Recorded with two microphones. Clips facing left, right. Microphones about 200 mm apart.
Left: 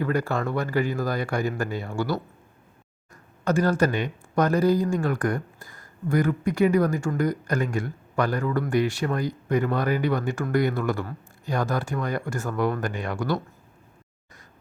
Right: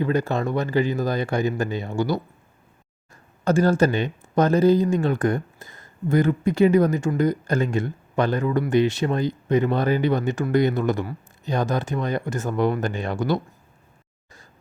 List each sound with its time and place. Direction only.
0.0 s speech: 20° right (ahead or behind)
3.4 s speech: 30° right (ahead or behind)